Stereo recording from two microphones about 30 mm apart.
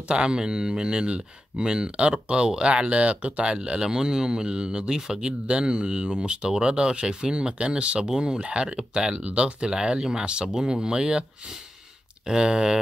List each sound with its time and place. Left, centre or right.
0.1 s speech: right
3.5 s speech: right
5.5 s speech: right
12.3 s speech: right